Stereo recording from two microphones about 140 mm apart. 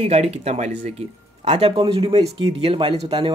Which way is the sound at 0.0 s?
50° right (ahead or behind).